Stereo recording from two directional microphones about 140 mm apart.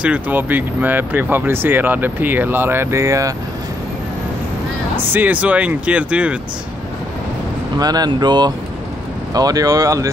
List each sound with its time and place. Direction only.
0.0 s speech: 10° right (ahead or behind)
4.9 s speech: 15° right (ahead or behind)
7.8 s speech: 30° right (ahead or behind)